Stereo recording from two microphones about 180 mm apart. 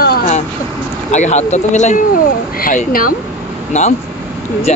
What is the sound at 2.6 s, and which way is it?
Speech, 50° left (ahead or behind).